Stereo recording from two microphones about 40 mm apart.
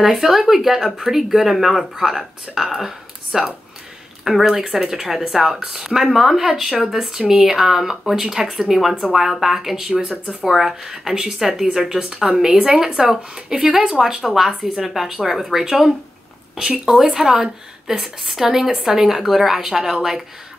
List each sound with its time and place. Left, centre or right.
0.0 s speech: centre; by 11.5 s right
11.5 s speech: centre